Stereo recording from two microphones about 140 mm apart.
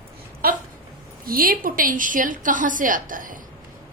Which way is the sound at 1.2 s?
90° right.